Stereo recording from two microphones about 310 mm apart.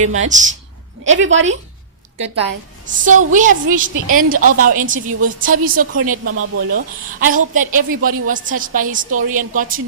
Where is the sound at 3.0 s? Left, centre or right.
Right.